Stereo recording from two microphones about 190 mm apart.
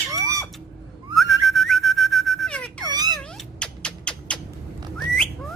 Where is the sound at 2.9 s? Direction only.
20° right (ahead or behind).